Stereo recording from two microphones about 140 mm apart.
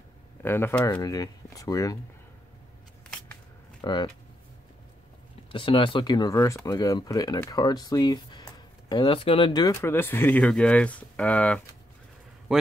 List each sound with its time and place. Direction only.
0.4 s speech: 15° left (ahead or behind)
3.8 s speech: 35° left (ahead or behind)
5.5 s speech: 35° left (ahead or behind); by 11.6 s 10° left (ahead or behind)
12.5 s a sound: 5° right (ahead or behind)